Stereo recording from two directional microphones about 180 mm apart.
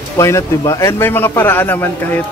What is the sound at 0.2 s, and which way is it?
A man's voice, 15° left (ahead or behind).